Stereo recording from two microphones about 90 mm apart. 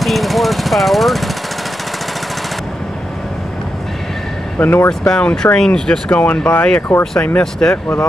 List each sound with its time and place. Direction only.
0.0 s vehicle: centre (ahead or behind)
4.6 s speech: 25° left (ahead or behind)
4.8 s speech: 10° left (ahead or behind)